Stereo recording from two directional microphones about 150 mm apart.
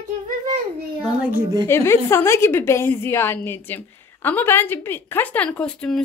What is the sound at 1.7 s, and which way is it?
A woman's voice, 15° left (ahead or behind).